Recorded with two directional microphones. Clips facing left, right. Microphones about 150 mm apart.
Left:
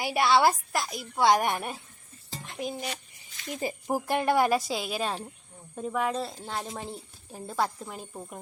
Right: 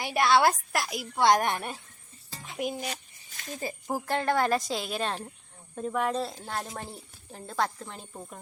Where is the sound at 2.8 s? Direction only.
45° right (ahead or behind).